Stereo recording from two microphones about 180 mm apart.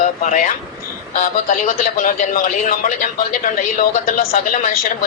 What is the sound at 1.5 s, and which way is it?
A woman's voice, 45° left (ahead or behind).